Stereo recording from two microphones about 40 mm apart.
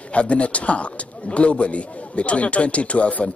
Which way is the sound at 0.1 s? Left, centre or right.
Left.